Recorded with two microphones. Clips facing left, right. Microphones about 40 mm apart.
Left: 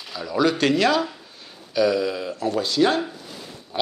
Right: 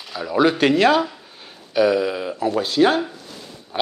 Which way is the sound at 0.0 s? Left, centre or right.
Centre.